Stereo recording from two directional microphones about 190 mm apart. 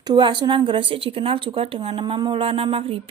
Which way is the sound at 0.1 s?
25° right (ahead or behind).